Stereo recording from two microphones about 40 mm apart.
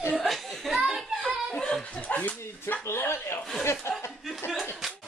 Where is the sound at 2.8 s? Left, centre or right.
Left.